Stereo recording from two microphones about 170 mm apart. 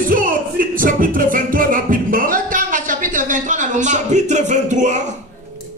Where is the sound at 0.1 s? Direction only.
55° right (ahead or behind).